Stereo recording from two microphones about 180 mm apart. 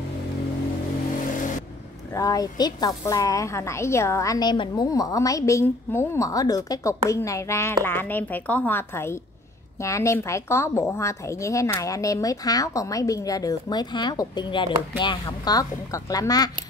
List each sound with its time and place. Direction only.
2.1 s a woman's voice: 20° left (ahead or behind)